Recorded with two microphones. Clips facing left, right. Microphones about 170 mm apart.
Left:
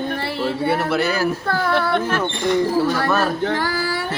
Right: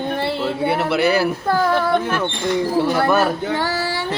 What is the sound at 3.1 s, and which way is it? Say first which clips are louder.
Female singing: right 2 dB; 10° right (ahead or behind).